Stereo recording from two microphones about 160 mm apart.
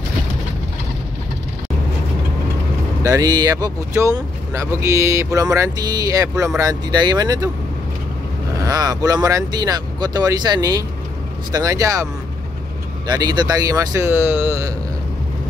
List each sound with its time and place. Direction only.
3.0 s speech: 20° right (ahead or behind)
8.5 s speech: 25° right (ahead or behind)